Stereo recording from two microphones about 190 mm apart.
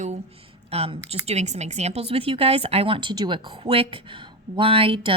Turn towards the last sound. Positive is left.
turn(degrees=-30)  # may be behind; listen again after turning